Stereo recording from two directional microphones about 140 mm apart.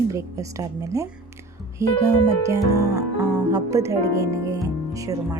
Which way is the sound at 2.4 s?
25° right (ahead or behind).